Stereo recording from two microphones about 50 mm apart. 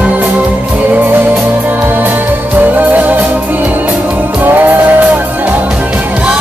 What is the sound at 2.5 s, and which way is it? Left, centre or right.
Music, right.